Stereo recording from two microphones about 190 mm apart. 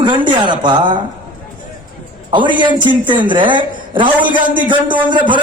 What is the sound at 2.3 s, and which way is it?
A man's voice, 25° right (ahead or behind).